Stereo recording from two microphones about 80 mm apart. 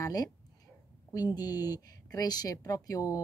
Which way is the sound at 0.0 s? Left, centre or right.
Left.